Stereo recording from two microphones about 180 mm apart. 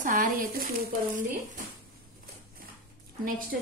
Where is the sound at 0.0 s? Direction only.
45° right (ahead or behind).